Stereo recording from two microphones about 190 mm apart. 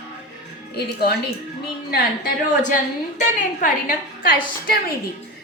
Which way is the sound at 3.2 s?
45° left (ahead or behind).